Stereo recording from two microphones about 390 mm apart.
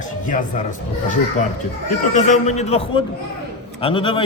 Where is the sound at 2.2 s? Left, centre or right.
Centre.